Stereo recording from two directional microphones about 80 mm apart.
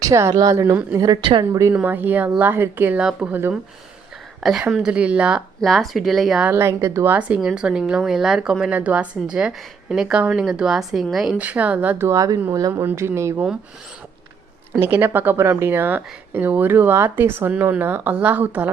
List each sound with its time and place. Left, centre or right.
0.0 s a woman's voice: right
1.0 s a woman's voice: right
1.8 s speech: right
3.0 s a woman's voice: centre
4.7 s a woman's voice: centre
5.5 s speech: centre
6.5 s a woman's voice: right
7.1 s a woman's voice: centre
8.7 s a woman's voice: centre
11.3 s speech: centre
12.0 s a woman's voice: right
12.8 s a woman's voice: right
14.8 s speech: right